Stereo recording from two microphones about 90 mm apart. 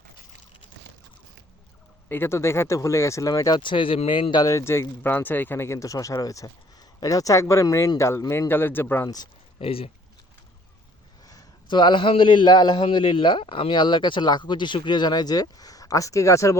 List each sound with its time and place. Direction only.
2.0 s speech: 25° left (ahead or behind)
3.5 s speech: 65° left (ahead or behind)
4.4 s speech: 35° left (ahead or behind)
9.0 s speech: 45° left (ahead or behind)
9.6 s speech: 90° left
11.7 s speech: 60° left (ahead or behind)
12.8 s speech: 70° left (ahead or behind); by 16.6 s 35° left (ahead or behind)